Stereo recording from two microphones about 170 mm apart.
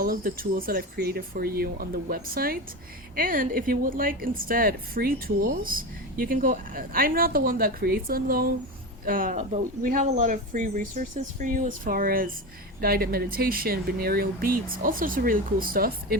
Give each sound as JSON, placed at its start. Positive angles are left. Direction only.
{"t": 0.0, "sound": "a woman's voice", "side_deg": -55}